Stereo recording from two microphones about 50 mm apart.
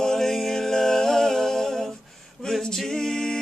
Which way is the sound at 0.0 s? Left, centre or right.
Centre.